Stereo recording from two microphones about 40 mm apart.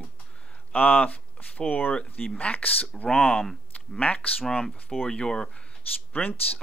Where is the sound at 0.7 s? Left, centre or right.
Left.